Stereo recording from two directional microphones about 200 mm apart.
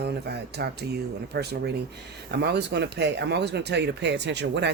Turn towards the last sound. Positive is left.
turn(degrees=-60)  # may be behind; listen again after turning